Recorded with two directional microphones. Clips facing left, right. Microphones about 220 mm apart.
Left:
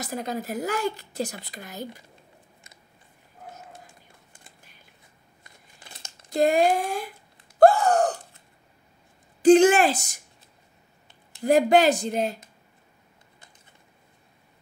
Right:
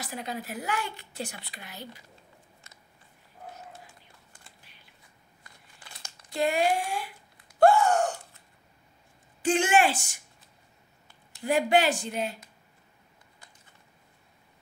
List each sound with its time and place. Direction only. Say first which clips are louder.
0.0 s a woman's voice: left 5 dB; 45° left (ahead or behind)
5.4 s crumpling: left 2 dB; 20° left (ahead or behind)
6.3 s speech: left 5 dB; 40° left (ahead or behind)
7.5 s gasp: left 4 dB; 35° left (ahead or behind)
9.4 s speech: left 8 dB; 40° left (ahead or behind)
11.4 s speech: left 6 dB; 40° left (ahead or behind)